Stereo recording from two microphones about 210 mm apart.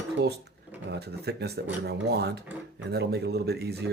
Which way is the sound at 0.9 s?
50° right (ahead or behind).